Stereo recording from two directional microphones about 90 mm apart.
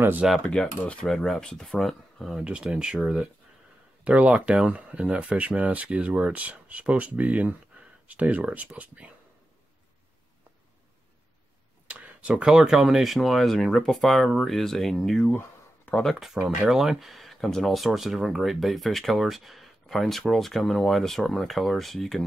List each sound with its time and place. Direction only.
0.5 s speech: 10° left (ahead or behind)
2.4 s speech: 10° right (ahead or behind)
11.9 s speech: 15° right (ahead or behind); by 15.3 s 5° left (ahead or behind)
15.3 s a sound: 20° left (ahead or behind)
16.0 s speech: centre (ahead or behind)